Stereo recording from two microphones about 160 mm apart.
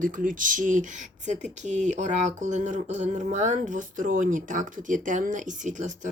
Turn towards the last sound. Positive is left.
turn(degrees=-50)  # may be behind; listen again after turning